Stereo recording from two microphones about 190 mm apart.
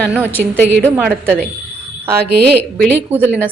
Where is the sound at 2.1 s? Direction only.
60° right (ahead or behind).